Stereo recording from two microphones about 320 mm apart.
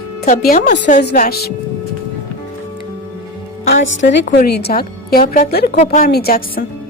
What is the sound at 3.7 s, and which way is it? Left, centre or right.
A woman's voice, left.